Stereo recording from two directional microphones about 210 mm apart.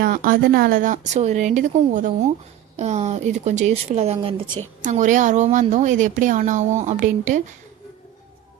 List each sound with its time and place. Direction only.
0.0 s a woman's voice: 40° right (ahead or behind)